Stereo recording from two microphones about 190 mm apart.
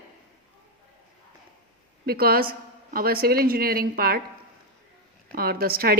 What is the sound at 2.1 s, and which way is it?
A woman's voice, 55° right (ahead or behind).